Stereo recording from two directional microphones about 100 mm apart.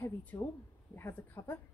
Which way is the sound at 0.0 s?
15° left (ahead or behind).